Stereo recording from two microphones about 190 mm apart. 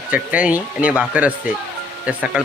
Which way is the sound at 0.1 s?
5° right (ahead or behind).